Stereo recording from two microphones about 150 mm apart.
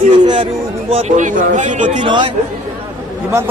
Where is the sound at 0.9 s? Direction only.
40° right (ahead or behind).